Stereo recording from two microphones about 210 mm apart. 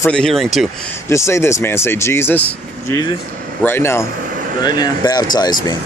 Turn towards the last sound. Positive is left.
turn(degrees=20)  # may be behind; listen again after turning